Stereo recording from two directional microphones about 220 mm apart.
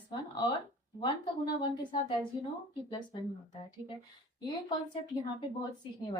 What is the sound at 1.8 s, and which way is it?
Speech, 20° left (ahead or behind).